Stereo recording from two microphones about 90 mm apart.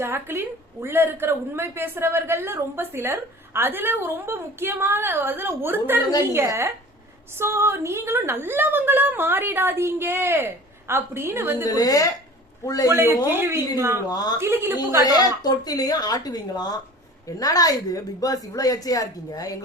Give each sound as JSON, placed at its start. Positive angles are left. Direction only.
{"t": 0.0, "sound": "a woman's voice", "side_deg": -25}
{"t": 11.7, "sound": "a woman's voice", "side_deg": 45}
{"t": 12.9, "sound": "a woman's voice", "side_deg": -35}
{"t": 14.1, "sound": "a woman's voice", "side_deg": 45}
{"t": 14.3, "sound": "a woman's voice", "side_deg": -25}
{"t": 15.0, "sound": "a woman's voice", "side_deg": 45}